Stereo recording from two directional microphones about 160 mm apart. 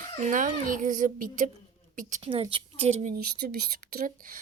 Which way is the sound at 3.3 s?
70° right (ahead or behind).